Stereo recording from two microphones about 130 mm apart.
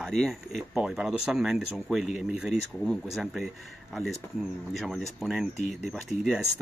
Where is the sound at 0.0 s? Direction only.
Centre (ahead or behind).